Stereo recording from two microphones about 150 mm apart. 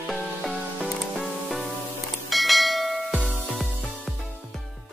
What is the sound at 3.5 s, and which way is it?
Music, centre (ahead or behind).